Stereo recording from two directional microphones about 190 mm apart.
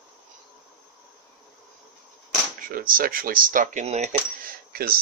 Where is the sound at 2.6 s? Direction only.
50° right (ahead or behind).